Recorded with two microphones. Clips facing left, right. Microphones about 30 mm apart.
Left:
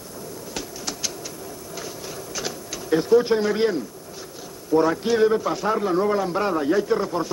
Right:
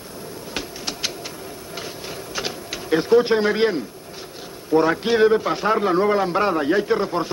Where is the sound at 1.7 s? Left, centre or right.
Right.